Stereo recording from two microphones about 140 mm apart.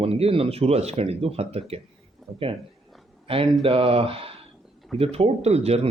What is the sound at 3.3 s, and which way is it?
Speech, 45° right (ahead or behind).